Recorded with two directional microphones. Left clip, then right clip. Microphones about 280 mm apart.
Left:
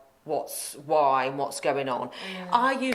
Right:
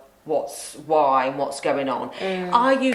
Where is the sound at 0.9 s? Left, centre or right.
Left.